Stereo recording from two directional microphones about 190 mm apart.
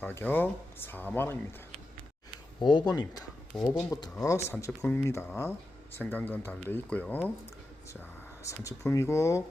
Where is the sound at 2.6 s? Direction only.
25° left (ahead or behind).